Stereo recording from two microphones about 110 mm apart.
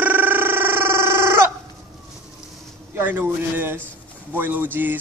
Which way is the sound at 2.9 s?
15° right (ahead or behind).